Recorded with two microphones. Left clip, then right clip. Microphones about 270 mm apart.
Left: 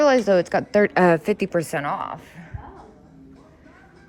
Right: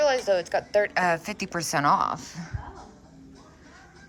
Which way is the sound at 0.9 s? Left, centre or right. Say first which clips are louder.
Left 7 dB; centre.